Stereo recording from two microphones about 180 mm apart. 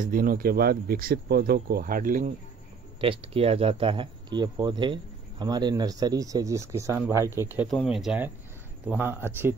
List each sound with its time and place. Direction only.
0.0 s speech: 50° right (ahead or behind)
3.0 s speech: 30° right (ahead or behind); by 7.6 s 15° right (ahead or behind)
7.6 s speech: centre (ahead or behind)